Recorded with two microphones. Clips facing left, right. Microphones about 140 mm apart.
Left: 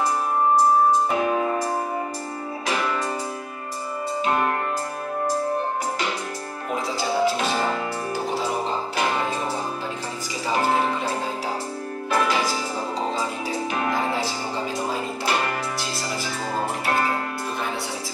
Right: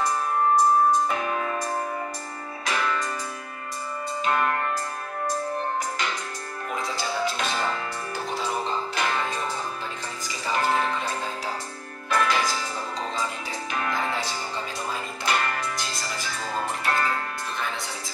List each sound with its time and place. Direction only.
1.1 s music: 20° left (ahead or behind)
2.6 s music: 15° left (ahead or behind)
4.2 s music: 20° left (ahead or behind)
6.7 s music: 15° left (ahead or behind)
8.9 s music: 20° left (ahead or behind)
10.5 s music: 15° left (ahead or behind)
12.1 s music: 10° left (ahead or behind)
13.7 s music: 20° left (ahead or behind)
16.8 s music: 15° left (ahead or behind)